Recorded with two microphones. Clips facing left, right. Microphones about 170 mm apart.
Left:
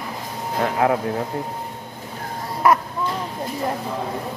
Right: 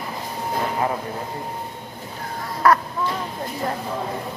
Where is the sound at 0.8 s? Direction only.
85° left.